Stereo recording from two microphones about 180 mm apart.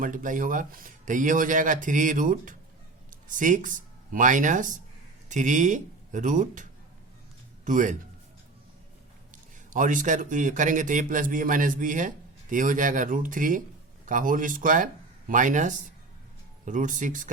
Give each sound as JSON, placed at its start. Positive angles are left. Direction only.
{"t": 0.0, "sound": "a man's voice", "side_deg": -45}
{"t": 9.3, "sound": "speech", "side_deg": -45}